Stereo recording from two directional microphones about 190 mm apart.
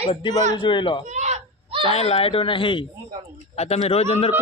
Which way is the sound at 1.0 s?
40° right (ahead or behind).